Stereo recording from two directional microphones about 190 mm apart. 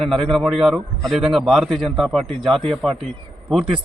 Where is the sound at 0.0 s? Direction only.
Centre (ahead or behind).